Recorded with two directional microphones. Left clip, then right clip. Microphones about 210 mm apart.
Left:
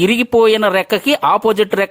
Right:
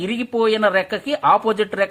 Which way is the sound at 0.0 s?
50° left (ahead or behind).